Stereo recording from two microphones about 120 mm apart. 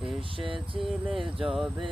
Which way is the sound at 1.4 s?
Centre (ahead or behind).